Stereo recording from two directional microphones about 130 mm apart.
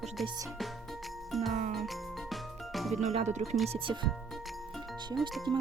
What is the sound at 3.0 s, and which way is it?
Speech, 60° right (ahead or behind).